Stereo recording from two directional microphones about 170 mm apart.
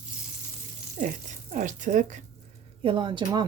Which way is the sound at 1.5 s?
50° right (ahead or behind).